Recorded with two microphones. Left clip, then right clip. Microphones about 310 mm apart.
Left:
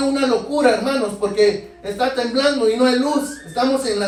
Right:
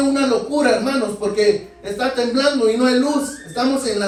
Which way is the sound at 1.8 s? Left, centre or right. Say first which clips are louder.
Even; left.